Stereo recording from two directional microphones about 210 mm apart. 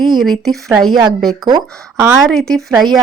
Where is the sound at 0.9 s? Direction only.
20° right (ahead or behind).